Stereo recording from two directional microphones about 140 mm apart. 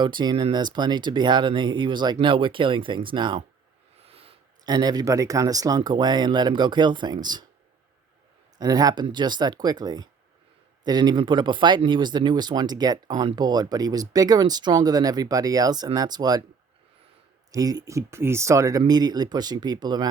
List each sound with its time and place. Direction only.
0.0 s speech: 35° right (ahead or behind)
4.0 s a sound: 45° right (ahead or behind)
4.6 s speech: 30° right (ahead or behind)
8.5 s speech: 30° right (ahead or behind)
17.5 s speech: 25° right (ahead or behind)